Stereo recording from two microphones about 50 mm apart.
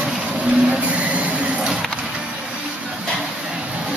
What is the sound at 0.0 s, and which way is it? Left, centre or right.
Vehicle, right.